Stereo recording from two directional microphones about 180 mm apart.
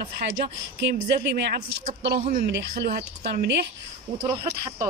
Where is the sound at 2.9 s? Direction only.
65° right (ahead or behind).